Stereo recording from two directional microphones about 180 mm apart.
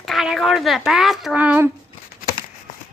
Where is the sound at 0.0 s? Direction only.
Centre (ahead or behind).